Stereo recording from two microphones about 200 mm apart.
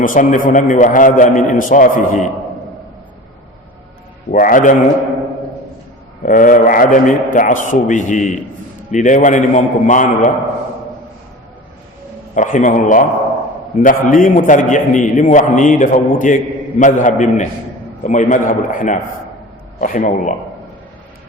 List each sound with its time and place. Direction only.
0.0 s a man's voice: 40° left (ahead or behind)
4.3 s a man's voice: 45° left (ahead or behind)
6.2 s a man's voice: 40° left (ahead or behind)
12.3 s a man's voice: 40° left (ahead or behind)